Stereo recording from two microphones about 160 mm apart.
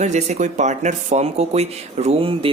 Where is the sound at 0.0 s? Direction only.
45° right (ahead or behind).